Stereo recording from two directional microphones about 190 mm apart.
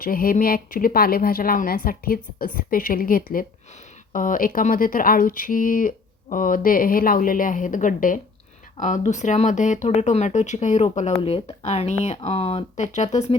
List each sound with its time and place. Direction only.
0.0 s a woman's voice: 50° left (ahead or behind)